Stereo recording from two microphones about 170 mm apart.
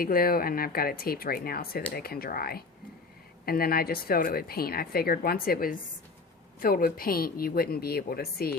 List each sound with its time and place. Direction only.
0.0 s a woman's voice: 60° left (ahead or behind)